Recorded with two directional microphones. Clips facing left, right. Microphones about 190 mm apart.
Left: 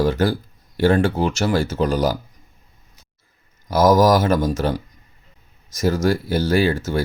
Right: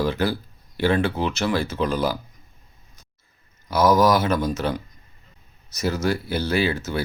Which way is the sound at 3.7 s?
45° left (ahead or behind).